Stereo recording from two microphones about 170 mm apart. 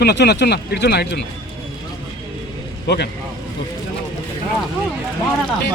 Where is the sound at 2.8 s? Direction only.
75° left (ahead or behind).